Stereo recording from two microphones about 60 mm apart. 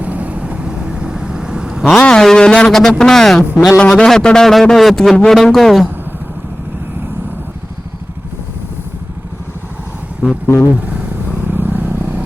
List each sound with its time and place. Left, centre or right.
0.0 s vehicle: right
2.0 s a man's voice: centre
3.8 s a man's voice: centre
10.4 s speech: left
11.4 s vehicle: right